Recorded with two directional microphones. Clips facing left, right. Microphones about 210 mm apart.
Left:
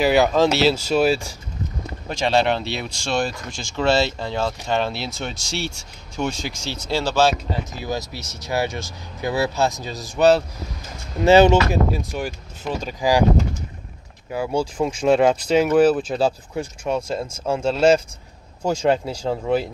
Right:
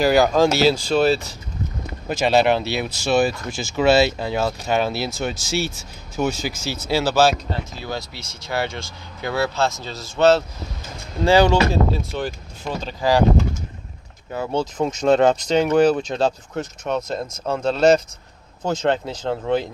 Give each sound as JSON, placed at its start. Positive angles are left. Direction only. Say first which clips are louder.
{"t": 0.0, "sound": "speech", "louder": "right 1 dB", "side_deg": 0}
{"t": 2.0, "sound": "speech", "louder": "right 2 dB", "side_deg": -5}
{"t": 7.8, "sound": "speech", "louder": "left 2 dB", "side_deg": 15}
{"t": 14.3, "sound": "speech", "louder": "left 1 dB", "side_deg": 10}